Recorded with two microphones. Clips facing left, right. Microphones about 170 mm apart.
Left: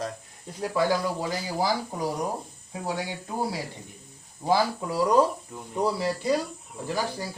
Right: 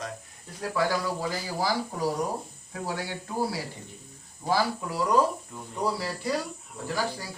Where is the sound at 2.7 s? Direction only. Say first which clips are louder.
Left 2 dB; 20° left (ahead or behind).